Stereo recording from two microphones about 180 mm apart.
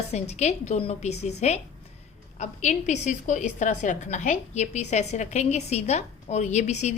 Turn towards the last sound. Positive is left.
turn(degrees=40)  # may be behind; listen again after turning